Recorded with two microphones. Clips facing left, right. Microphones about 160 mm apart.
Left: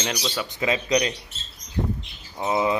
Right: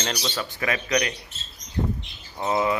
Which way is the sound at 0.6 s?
20° left (ahead or behind).